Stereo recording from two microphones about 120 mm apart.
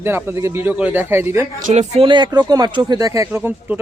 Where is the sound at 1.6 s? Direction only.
70° right (ahead or behind).